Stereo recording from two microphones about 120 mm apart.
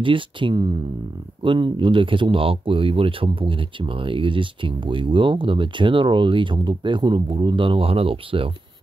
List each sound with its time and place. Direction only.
0.0 s speech: 45° right (ahead or behind)